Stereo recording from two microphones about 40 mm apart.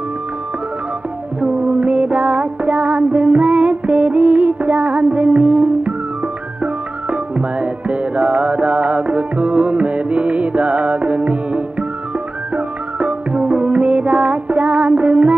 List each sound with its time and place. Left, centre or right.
1.4 s music: right